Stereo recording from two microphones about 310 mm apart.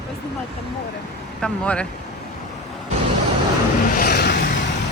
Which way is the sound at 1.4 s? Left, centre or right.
Centre.